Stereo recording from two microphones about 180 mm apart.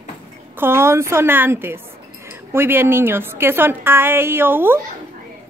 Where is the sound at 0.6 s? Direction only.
15° right (ahead or behind).